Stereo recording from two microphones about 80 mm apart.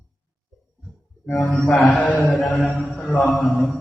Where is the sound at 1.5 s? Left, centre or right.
Centre.